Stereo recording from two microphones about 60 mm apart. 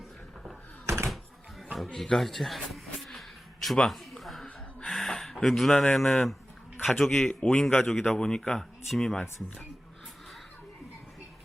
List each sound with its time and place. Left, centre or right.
0.9 s door: right
1.1 s a sound: centre
4.9 s speech: centre
7.3 s a man's voice: centre
7.9 s speech: centre